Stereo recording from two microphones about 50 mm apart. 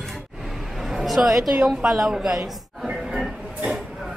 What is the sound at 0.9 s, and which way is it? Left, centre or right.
A woman's voice, centre.